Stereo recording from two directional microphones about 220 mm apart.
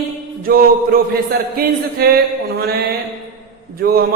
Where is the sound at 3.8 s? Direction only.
45° right (ahead or behind).